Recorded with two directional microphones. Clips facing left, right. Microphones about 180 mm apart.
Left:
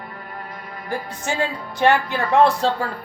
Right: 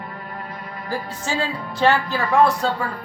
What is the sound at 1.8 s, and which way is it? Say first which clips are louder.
A woman's voice: left 1 dB; 15° left (ahead or behind).